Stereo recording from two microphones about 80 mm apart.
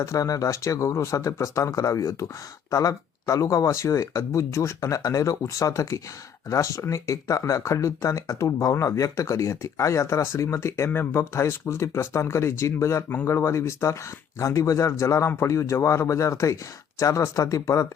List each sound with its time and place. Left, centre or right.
0.0 s speech: left